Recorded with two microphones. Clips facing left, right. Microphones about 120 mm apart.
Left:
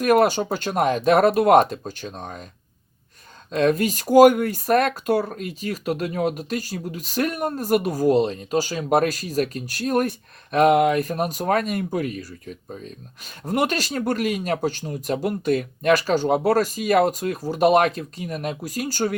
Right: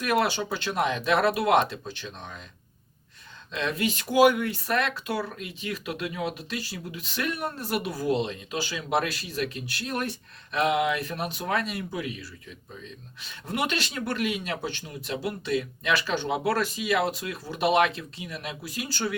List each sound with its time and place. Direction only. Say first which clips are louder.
0.0 s speech: left 8 dB; 45° left (ahead or behind)
3.5 s speech: left 9 dB; 45° left (ahead or behind)